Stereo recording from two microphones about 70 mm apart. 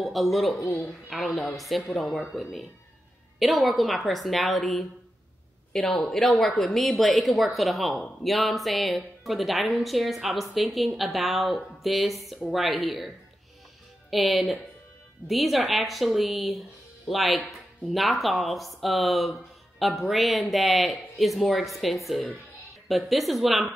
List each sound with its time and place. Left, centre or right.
0.0 s speech: centre
14.1 s speech: centre